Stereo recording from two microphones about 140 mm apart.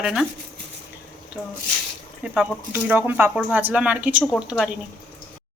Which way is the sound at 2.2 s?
5° right (ahead or behind).